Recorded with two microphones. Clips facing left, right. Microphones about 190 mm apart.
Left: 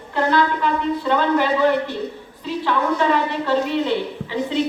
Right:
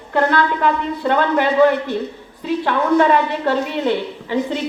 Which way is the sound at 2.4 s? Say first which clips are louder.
Right 3 dB; 55° right (ahead or behind).